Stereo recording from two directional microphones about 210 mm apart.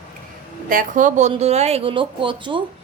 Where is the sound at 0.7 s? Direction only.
40° right (ahead or behind).